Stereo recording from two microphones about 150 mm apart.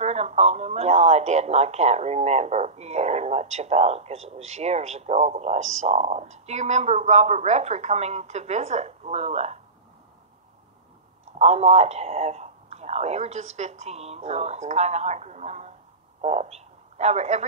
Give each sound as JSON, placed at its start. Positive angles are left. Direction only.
{"t": 0.0, "sound": "speech", "side_deg": -45}
{"t": 11.3, "sound": "speech", "side_deg": -45}